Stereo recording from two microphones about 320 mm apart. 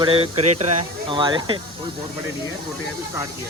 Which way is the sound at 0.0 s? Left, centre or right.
Centre.